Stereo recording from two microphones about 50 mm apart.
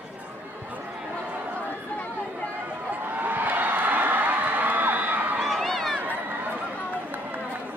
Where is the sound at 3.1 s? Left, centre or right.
Right.